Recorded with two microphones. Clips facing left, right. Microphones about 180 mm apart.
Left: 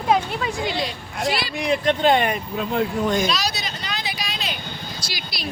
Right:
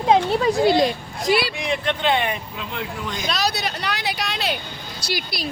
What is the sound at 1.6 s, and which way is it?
Speech, 40° left (ahead or behind).